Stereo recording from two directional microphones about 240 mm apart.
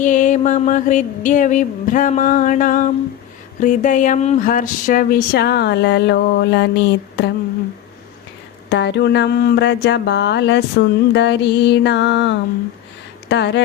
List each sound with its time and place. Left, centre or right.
0.0 s speech: left
8.7 s a sound: left
13.2 s speech: left